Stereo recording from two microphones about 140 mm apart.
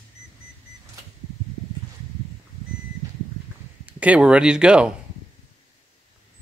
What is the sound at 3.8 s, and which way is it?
Speech, 10° right (ahead or behind).